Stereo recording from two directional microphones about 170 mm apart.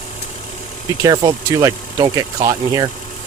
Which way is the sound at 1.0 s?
25° right (ahead or behind).